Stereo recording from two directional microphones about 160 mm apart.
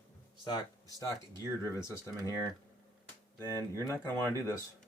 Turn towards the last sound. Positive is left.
turn(degrees=15)  # may be behind; listen again after turning